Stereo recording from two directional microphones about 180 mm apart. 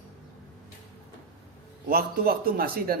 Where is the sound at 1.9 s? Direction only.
55° right (ahead or behind).